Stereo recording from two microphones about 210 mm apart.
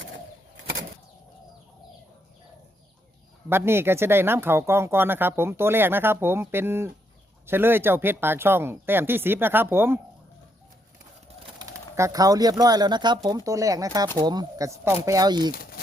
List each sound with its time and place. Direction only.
3.5 s speech: 10° right (ahead or behind)
11.6 s speech: 15° right (ahead or behind)